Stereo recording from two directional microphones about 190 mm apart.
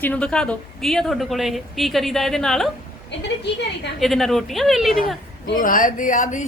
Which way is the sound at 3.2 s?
65° left (ahead or behind).